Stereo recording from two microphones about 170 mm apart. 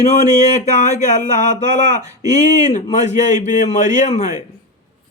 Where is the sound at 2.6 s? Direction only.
45° left (ahead or behind).